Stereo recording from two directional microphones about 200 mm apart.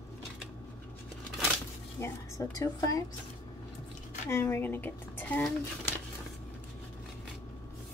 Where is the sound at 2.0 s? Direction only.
15° left (ahead or behind).